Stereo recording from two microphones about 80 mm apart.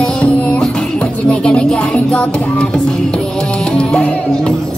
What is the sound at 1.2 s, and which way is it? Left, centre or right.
Music, centre.